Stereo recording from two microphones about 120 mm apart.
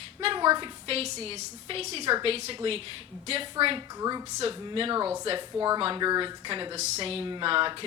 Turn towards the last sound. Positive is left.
turn(degrees=-45)  # may be behind; listen again after turning